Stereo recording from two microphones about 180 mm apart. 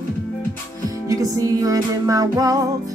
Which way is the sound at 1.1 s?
20° right (ahead or behind).